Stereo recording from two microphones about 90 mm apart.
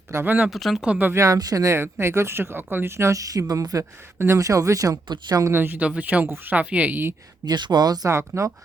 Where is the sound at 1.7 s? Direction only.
25° right (ahead or behind); by 5.4 s 50° right (ahead or behind).